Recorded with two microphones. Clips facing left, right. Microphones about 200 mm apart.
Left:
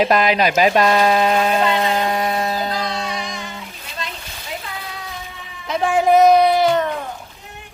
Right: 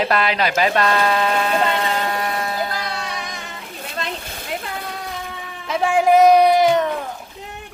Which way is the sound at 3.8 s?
55° right (ahead or behind).